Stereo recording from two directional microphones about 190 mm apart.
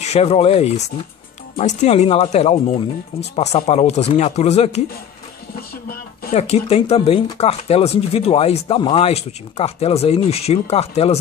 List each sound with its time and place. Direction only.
0.0 s speech: 35° left (ahead or behind)
6.3 s speech: 35° left (ahead or behind)